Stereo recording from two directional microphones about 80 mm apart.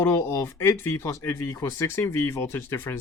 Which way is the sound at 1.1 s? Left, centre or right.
Left.